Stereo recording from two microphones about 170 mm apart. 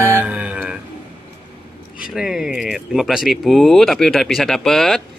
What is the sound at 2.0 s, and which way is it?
Speech, 5° right (ahead or behind).